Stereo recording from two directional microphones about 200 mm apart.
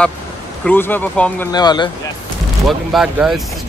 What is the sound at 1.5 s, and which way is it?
Speech, 20° left (ahead or behind).